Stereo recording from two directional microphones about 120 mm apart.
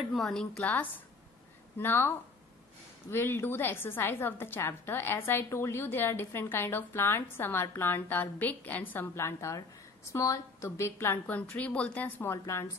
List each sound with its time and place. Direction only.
0.1 s a woman's voice: centre (ahead or behind)
0.6 s a woman's voice: 15° left (ahead or behind)